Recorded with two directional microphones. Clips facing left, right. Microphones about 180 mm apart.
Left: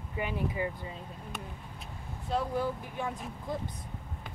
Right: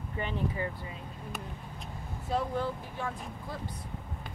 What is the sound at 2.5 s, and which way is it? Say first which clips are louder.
Speech: left 1 dB; 15° left (ahead or behind).